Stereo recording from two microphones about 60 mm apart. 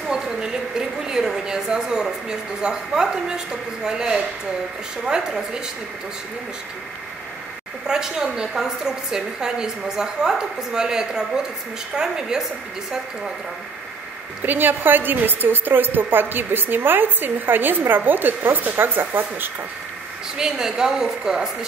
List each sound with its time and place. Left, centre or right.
0.1 s a woman's voice: centre
7.8 s a woman's voice: centre
14.4 s a woman's voice: right
20.3 s a woman's voice: centre